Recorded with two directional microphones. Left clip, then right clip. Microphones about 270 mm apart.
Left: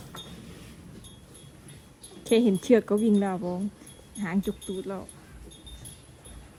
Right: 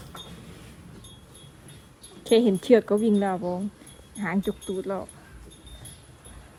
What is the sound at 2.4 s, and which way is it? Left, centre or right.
Speech, centre.